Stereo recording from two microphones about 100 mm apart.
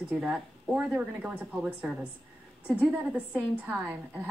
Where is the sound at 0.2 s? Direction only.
10° right (ahead or behind).